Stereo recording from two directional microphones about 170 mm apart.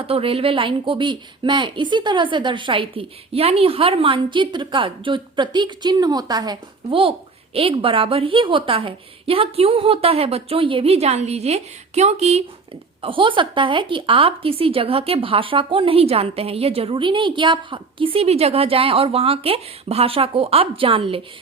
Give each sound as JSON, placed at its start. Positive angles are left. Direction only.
{"t": 0.1, "sound": "a woman's voice", "side_deg": -35}